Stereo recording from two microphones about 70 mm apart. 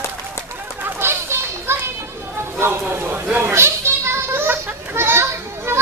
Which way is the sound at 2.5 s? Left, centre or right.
Right.